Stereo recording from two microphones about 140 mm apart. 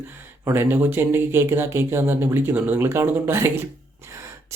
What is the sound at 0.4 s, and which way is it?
Speech, 15° right (ahead or behind).